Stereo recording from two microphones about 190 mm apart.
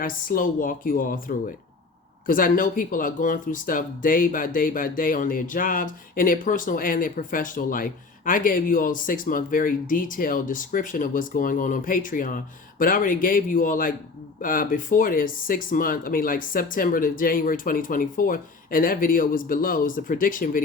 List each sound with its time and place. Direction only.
0.0 s speech: 50° left (ahead or behind)